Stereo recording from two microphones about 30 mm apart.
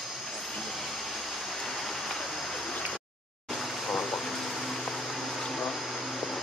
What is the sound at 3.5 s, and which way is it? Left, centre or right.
Air conditioning, centre.